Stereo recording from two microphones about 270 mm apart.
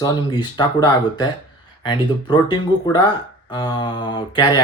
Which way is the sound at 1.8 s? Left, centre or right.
Centre.